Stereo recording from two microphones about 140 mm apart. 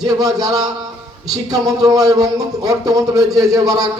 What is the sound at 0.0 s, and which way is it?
Speech, 25° right (ahead or behind).